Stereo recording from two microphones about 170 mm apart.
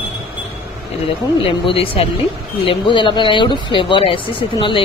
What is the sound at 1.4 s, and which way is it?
Speech, 35° left (ahead or behind).